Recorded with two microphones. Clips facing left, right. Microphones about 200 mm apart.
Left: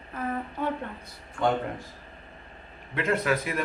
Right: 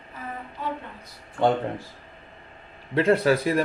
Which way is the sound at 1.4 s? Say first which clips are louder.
Right 4 dB; 30° right (ahead or behind).